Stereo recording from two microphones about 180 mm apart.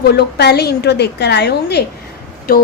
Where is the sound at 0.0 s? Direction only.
65° left (ahead or behind).